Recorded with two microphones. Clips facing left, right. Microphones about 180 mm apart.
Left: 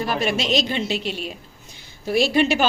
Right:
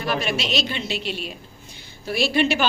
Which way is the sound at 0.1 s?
45° left (ahead or behind).